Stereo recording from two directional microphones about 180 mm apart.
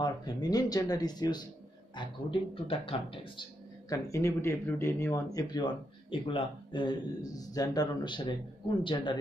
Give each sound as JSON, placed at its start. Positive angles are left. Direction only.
{"t": 0.0, "sound": "speech", "side_deg": 20}
{"t": 3.9, "sound": "speech", "side_deg": 15}